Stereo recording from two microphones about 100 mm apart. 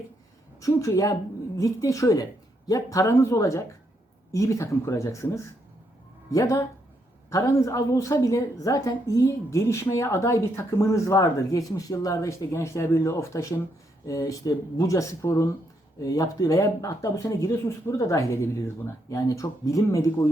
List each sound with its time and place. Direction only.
0.6 s a woman's voice: 35° left (ahead or behind)